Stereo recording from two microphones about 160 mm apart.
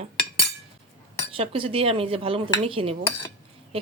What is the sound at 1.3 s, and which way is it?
Speech, 35° right (ahead or behind).